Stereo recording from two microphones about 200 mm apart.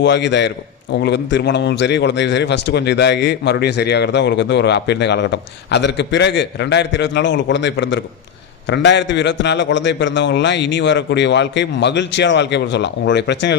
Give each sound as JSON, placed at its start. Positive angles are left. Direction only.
{"t": 0.0, "sound": "a man's voice", "side_deg": 60}